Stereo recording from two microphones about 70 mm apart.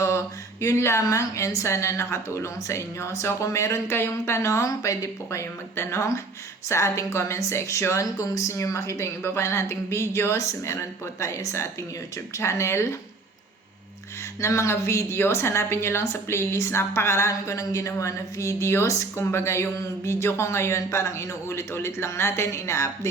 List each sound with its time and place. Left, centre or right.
0.6 s a woman's voice: left
14.4 s a woman's voice: left